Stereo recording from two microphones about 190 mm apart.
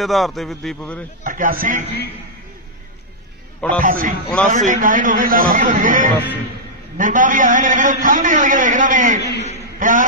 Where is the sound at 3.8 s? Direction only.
45° right (ahead or behind).